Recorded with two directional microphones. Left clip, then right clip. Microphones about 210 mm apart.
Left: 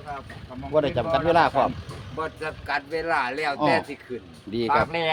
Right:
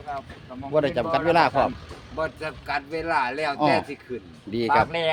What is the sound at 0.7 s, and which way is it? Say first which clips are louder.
Speech: even; 5° right (ahead or behind).